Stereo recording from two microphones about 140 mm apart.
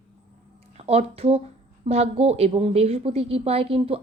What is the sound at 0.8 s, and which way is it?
A woman's voice, 45° right (ahead or behind).